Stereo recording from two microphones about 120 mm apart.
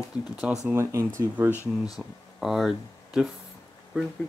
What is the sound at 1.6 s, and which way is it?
Speech, 30° left (ahead or behind).